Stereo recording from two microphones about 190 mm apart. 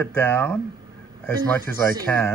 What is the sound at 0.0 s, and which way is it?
Speech, 10° left (ahead or behind).